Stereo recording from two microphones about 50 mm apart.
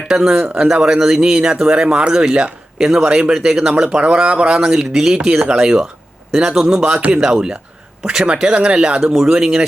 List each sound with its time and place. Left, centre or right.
0.3 s speech: right
0.6 s speech: centre